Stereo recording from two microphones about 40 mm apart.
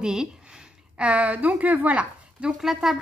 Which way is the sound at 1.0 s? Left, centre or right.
Right.